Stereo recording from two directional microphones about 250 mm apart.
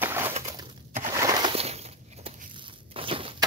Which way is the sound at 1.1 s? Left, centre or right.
Centre.